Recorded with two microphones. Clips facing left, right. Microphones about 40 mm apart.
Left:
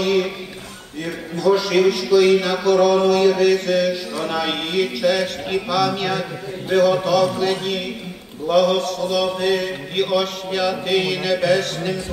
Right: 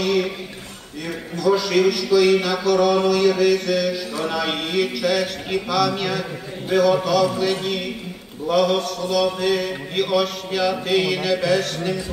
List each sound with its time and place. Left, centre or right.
0.0 s a sound: centre
1.3 s mantra: centre
2.5 s mantra: centre
3.3 s mantra: centre
6.7 s a man's voice: centre
8.5 s mantra: centre